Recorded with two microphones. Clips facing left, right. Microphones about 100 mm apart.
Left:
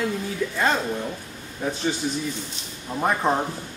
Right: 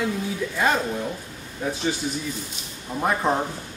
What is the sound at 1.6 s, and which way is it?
Speech, 5° right (ahead or behind).